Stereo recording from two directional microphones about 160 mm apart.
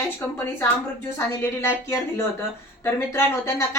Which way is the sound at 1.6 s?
15° left (ahead or behind).